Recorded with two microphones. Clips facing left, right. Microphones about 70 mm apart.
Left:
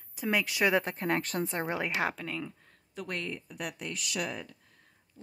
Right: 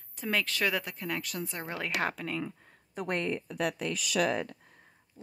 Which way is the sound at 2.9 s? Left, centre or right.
Right.